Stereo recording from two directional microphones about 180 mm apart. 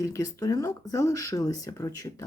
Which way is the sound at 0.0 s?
20° left (ahead or behind).